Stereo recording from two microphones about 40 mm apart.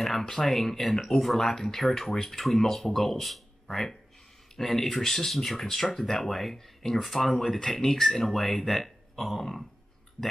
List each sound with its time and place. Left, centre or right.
0.0 s speech: centre
3.7 s speech: centre